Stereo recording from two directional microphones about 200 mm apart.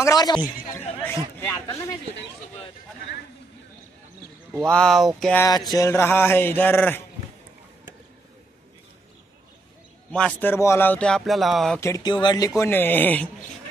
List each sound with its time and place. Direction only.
0.0 s a man's voice: 20° left (ahead or behind)
4.6 s speech: 5° left (ahead or behind)
5.4 s a man's voice: 20° left (ahead or behind)
10.1 s speech: 5° left (ahead or behind)
11.8 s speech: 20° left (ahead or behind)